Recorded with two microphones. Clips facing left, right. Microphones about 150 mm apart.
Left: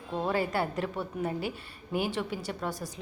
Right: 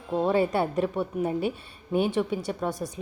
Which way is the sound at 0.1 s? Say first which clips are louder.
Right 6 dB; 20° right (ahead or behind).